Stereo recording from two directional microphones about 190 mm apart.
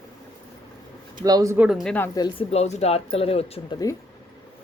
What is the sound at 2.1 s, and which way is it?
Speech, 25° left (ahead or behind).